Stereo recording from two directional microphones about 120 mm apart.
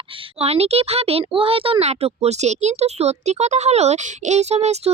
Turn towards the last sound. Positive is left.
turn(degrees=-65)  # may be behind; listen again after turning